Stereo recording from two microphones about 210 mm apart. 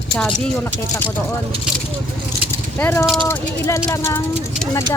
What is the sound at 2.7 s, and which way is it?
Speech, 10° left (ahead or behind).